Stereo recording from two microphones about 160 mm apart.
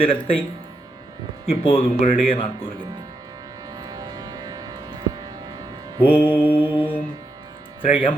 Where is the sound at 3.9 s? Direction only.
25° right (ahead or behind).